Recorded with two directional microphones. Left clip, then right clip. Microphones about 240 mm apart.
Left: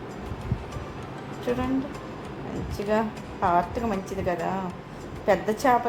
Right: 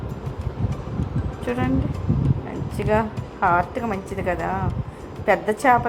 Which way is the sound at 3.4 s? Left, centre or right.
Centre.